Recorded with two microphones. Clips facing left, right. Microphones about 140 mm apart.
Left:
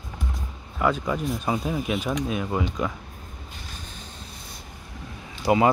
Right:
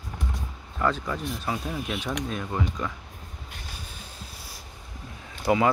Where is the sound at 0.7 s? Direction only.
10° left (ahead or behind).